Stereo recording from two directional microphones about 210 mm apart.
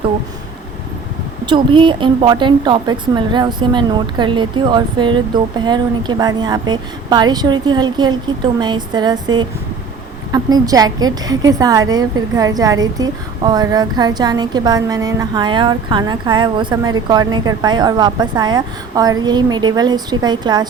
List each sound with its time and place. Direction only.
1.5 s a woman's voice: 20° right (ahead or behind)